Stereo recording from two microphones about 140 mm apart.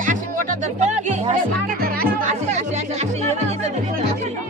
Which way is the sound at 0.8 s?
55° right (ahead or behind).